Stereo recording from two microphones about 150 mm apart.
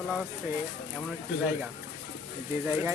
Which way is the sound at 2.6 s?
15° right (ahead or behind).